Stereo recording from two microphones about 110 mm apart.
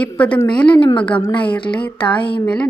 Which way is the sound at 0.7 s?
50° left (ahead or behind).